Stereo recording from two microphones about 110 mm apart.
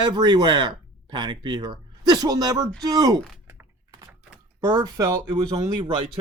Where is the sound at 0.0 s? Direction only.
40° right (ahead or behind).